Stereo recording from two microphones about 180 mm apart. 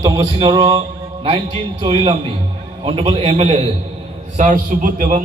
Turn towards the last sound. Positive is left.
turn(degrees=-50)  # may be behind; listen again after turning